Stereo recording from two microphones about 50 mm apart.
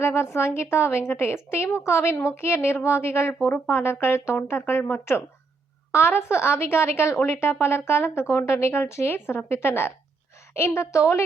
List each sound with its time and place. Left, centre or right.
0.0 s a woman's voice: left
4.4 s a woman's voice: left
10.5 s a woman's voice: left